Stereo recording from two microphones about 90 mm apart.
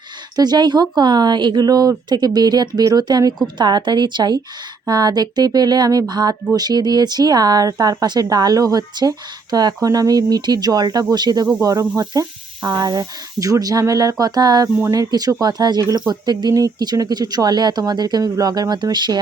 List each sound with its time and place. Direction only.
0.3 s a woman's voice: 50° right (ahead or behind)